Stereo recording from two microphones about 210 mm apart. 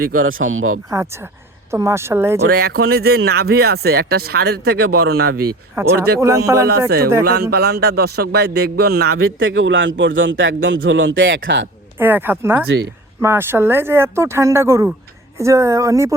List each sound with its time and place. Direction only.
0.1 s speech: 75° right (ahead or behind)
0.9 s speech: 15° right (ahead or behind)
2.5 s speech: 50° right (ahead or behind)
5.5 s speech: 10° right (ahead or behind)
6.7 s speech: 50° right (ahead or behind)
9.1 s a man's voice: 70° right (ahead or behind)
11.9 s speech: 10° right (ahead or behind)